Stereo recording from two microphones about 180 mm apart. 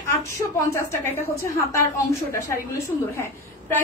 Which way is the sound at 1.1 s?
15° left (ahead or behind).